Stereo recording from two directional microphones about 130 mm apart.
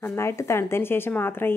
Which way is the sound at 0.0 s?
20° left (ahead or behind).